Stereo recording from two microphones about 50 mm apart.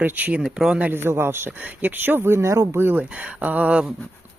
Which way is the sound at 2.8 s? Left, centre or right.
Right.